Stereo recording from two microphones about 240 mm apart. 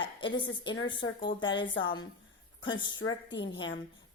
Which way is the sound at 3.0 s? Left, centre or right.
Left.